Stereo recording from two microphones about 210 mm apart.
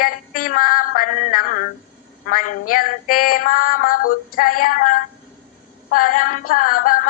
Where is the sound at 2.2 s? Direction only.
40° left (ahead or behind).